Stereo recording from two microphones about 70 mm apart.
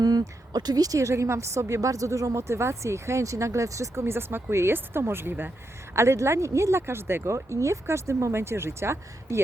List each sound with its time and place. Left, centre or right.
0.0 s speech: right
4.0 s speech: right